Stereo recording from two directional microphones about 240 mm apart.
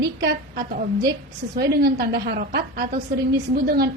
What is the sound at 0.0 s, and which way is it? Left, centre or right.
A woman's voice, right.